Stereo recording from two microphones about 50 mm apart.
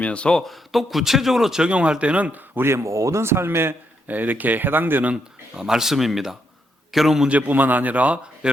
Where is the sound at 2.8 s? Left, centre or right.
Right.